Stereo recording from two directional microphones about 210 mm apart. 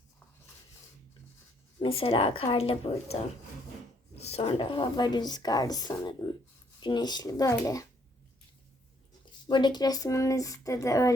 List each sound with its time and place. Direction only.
1.8 s a woman's voice: 25° left (ahead or behind)
4.2 s a woman's voice: 30° left (ahead or behind)
9.5 s speech: 20° left (ahead or behind)